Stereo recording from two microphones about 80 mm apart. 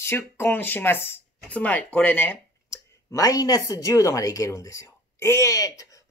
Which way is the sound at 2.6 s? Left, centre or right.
Left.